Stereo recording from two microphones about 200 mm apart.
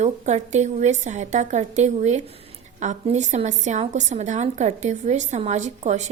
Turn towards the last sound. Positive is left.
turn(degrees=-35)  # may be behind; listen again after turning